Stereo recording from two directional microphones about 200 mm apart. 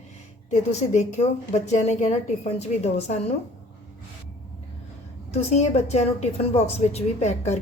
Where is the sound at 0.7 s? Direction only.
35° left (ahead or behind).